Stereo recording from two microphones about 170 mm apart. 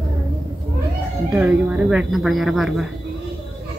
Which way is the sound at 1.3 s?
10° right (ahead or behind).